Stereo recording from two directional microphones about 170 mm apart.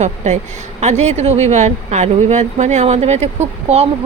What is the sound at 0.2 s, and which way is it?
Speech, 45° right (ahead or behind).